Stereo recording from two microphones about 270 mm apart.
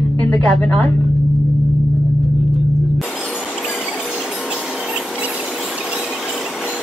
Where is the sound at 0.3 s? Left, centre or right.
Centre.